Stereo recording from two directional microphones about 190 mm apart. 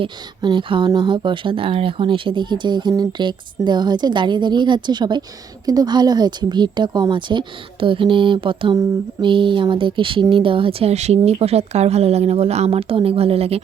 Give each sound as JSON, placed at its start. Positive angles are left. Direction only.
{"t": 0.0, "sound": "speech", "side_deg": -25}